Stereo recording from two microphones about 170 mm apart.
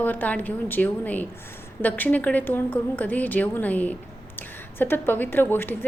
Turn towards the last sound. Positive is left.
turn(degrees=10)  # may be behind; listen again after turning